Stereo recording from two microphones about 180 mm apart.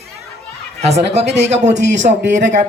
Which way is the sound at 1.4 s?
40° right (ahead or behind).